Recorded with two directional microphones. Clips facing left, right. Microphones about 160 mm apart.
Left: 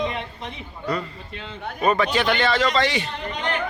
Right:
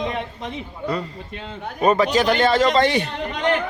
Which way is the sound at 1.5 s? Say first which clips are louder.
Right 3 dB; 40° right (ahead or behind).